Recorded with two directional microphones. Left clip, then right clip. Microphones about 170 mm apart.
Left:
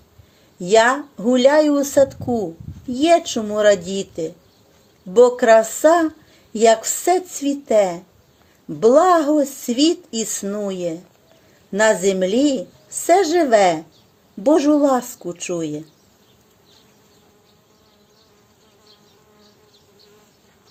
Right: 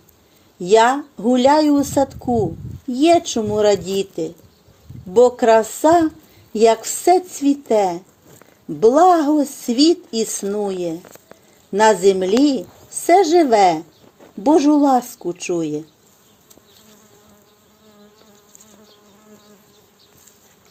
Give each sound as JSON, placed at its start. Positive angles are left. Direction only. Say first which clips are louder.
{"t": 0.6, "sound": "speech", "louder": "right 1 dB", "side_deg": -30}